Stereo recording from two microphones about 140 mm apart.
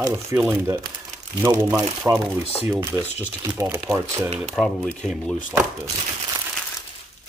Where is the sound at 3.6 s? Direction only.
20° right (ahead or behind).